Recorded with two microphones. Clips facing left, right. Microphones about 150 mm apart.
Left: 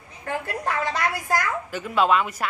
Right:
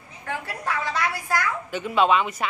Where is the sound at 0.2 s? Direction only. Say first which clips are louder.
Left 3 dB; 45° left (ahead or behind).